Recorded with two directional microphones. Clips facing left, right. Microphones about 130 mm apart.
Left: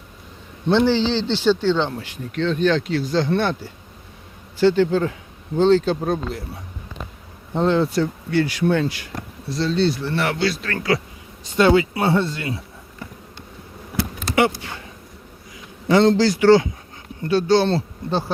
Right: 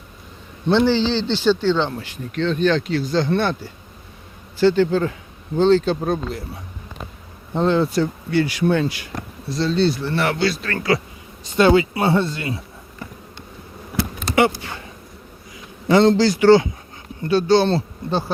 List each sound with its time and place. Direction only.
0.7 s speech: 15° left (ahead or behind)
6.0 s speech: centre (ahead or behind)
7.5 s speech: centre (ahead or behind)
7.9 s speech: 10° right (ahead or behind)
9.5 s speech: 30° right (ahead or behind)
15.9 s speech: 20° right (ahead or behind)